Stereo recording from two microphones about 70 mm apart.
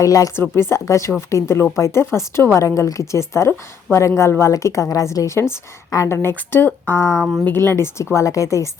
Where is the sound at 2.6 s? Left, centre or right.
Left.